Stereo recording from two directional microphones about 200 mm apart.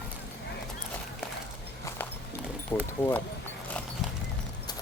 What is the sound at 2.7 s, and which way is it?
Speech, 15° left (ahead or behind).